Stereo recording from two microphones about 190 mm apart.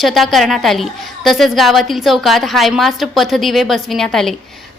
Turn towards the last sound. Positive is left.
turn(degrees=0)  # may be behind; listen again after turning